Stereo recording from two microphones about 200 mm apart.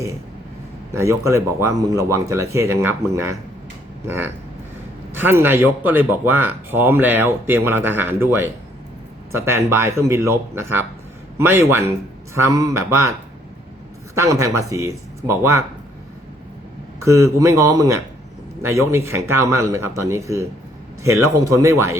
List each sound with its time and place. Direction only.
0.9 s speech: 15° right (ahead or behind)
14.2 s speech: 15° right (ahead or behind)
17.0 s speech: 15° right (ahead or behind)